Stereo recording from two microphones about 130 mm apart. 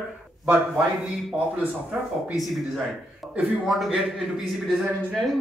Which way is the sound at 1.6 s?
10° right (ahead or behind).